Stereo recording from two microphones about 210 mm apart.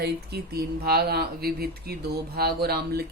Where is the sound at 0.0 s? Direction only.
50° right (ahead or behind).